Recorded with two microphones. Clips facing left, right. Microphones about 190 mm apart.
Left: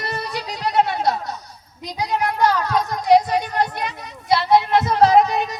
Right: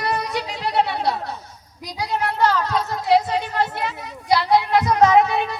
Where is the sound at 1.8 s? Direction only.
20° left (ahead or behind).